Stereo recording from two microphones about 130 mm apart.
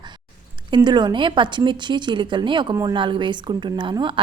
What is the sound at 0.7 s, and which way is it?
A woman's voice, 35° right (ahead or behind).